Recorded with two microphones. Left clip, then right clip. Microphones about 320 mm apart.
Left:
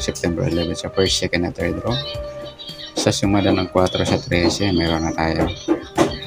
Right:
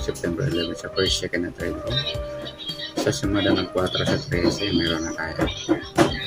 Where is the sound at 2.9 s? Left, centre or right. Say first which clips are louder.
Left 5 dB; centre.